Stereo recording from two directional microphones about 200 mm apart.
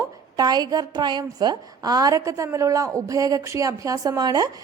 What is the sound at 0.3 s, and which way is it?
A woman's voice, 20° right (ahead or behind).